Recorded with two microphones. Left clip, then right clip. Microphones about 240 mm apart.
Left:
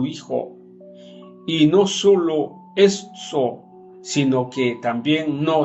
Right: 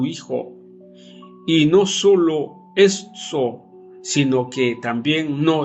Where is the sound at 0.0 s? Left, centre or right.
Right.